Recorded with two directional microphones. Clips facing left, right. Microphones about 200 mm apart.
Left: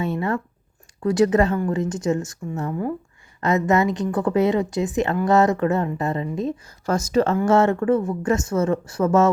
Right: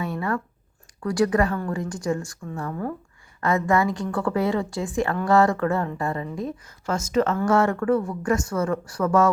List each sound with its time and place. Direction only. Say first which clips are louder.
0.0 s a sound: left 3 dB; 25° left (ahead or behind)
1.0 s a woman's voice: left 4 dB; 20° left (ahead or behind)
6.8 s a woman's voice: left 3 dB; 35° left (ahead or behind)